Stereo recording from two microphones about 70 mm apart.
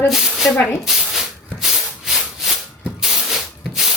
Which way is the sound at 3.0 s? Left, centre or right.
Centre.